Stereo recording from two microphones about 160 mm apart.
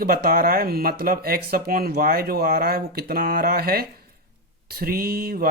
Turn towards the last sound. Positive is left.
turn(degrees=-70)  # may be behind; listen again after turning